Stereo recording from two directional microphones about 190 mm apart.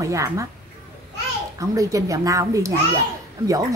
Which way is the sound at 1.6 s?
15° right (ahead or behind).